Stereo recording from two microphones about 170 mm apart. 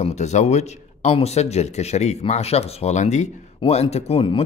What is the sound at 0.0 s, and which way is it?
Speech, 40° left (ahead or behind).